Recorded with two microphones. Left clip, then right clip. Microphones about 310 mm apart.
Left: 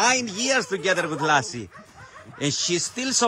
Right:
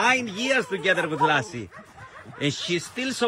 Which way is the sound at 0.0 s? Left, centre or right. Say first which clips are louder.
Left 1 dB; centre.